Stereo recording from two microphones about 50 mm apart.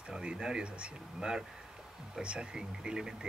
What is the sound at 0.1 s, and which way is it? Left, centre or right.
Speech, centre.